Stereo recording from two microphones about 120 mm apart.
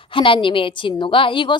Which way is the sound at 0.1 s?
45° left (ahead or behind).